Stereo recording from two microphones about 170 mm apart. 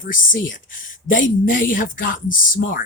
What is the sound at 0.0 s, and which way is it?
Speech, 55° left (ahead or behind).